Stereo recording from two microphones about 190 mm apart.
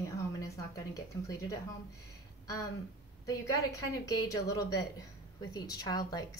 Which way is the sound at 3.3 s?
20° left (ahead or behind).